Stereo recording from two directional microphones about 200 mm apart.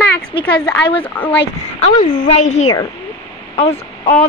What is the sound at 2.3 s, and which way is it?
Speech, 35° left (ahead or behind).